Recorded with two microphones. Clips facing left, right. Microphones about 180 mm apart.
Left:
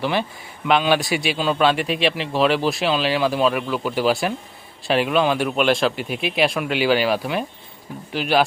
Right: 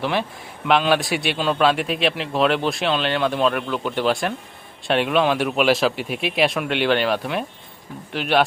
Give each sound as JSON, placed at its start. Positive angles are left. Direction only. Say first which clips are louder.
{"t": 0.0, "sound": "a man's voice", "louder": "left 1 dB", "side_deg": 0}